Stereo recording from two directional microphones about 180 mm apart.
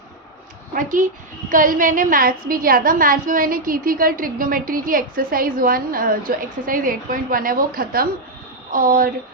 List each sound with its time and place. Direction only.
0.7 s a woman's voice: 45° right (ahead or behind)